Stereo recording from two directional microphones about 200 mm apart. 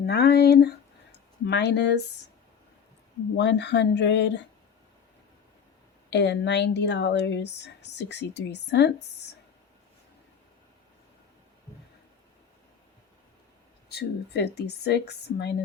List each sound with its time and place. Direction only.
0.0 s speech: 55° left (ahead or behind)
3.3 s speech: 60° left (ahead or behind)
6.1 s speech: 60° left (ahead or behind)
13.9 s speech: 55° left (ahead or behind)